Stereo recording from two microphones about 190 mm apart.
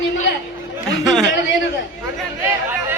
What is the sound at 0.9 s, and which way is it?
Speech, centre (ahead or behind).